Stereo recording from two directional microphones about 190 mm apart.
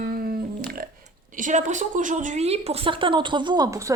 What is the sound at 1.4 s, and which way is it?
A woman's voice, 40° right (ahead or behind).